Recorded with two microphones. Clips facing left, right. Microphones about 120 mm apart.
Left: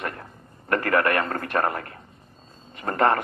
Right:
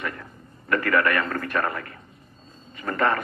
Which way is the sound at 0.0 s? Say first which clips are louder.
Even; 35° left (ahead or behind).